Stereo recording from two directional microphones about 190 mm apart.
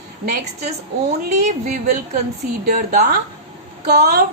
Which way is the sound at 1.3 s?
40° right (ahead or behind).